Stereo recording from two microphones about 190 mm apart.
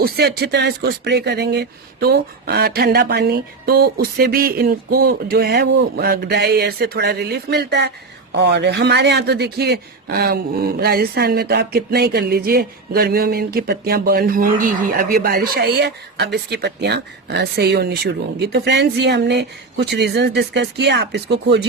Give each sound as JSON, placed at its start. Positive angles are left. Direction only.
{"t": 0.0, "sound": "a man's voice", "side_deg": -55}